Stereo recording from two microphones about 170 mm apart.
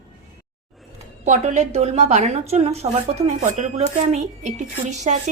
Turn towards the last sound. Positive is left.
turn(degrees=-45)  # may be behind; listen again after turning